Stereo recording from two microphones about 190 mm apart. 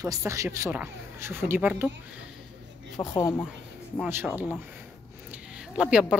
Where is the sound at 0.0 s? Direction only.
15° right (ahead or behind).